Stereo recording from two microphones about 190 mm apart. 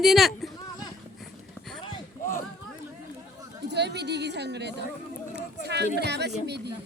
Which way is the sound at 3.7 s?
60° right (ahead or behind).